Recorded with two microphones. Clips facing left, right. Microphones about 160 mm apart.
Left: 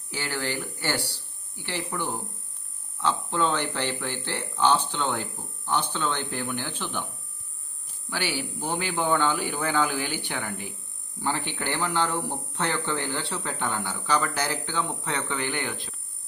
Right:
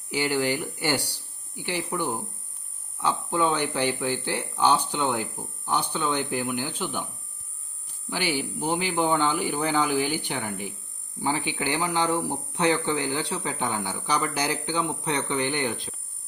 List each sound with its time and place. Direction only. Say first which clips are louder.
0.1 s speech: right 6 dB; 15° right (ahead or behind)
8.1 s speech: right 3 dB; 15° right (ahead or behind)